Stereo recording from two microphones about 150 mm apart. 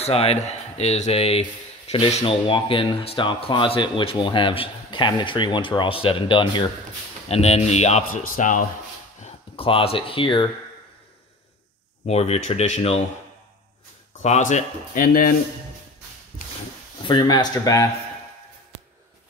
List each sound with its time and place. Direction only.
0.0 s speech: 40° left (ahead or behind)
7.2 s speech: 45° left (ahead or behind)
8.1 s speech: 60° left (ahead or behind)
9.2 s speech: 35° left (ahead or behind)
12.1 s speech: 45° left (ahead or behind)
14.1 s speech: 55° left (ahead or behind)
17.0 s speech: 30° left (ahead or behind)